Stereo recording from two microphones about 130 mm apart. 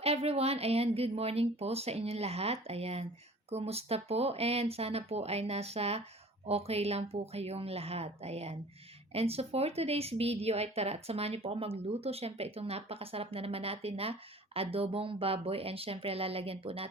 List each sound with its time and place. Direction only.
0.0 s speech: 50° right (ahead or behind)